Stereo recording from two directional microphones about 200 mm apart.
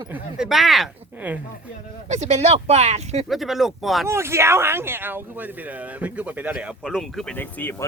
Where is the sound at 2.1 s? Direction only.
35° right (ahead or behind).